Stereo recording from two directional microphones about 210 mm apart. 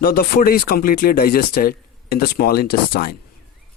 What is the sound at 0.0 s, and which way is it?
Speech, 45° left (ahead or behind).